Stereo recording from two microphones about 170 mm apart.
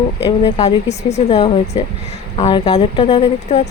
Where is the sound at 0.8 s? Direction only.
40° left (ahead or behind).